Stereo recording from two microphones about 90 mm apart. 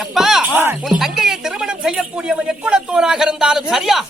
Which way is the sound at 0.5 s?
25° right (ahead or behind).